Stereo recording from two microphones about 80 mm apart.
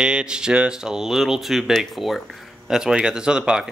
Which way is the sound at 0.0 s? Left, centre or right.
Centre.